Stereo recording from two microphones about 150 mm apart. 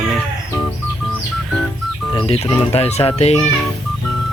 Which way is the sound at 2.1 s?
40° left (ahead or behind).